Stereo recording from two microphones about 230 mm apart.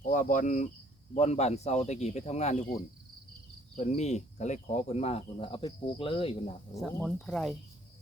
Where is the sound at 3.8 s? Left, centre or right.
Left.